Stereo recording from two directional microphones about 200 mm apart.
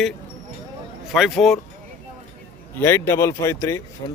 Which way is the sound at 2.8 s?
15° left (ahead or behind).